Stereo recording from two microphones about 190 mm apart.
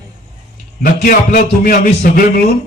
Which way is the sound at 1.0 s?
45° left (ahead or behind).